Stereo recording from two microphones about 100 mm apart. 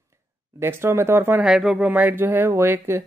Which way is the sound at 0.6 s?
25° right (ahead or behind).